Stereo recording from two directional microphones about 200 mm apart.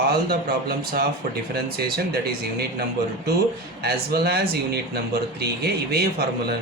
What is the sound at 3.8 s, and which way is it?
A man's voice, 50° right (ahead or behind).